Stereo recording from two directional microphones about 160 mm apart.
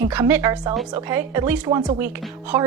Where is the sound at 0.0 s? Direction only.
10° right (ahead or behind).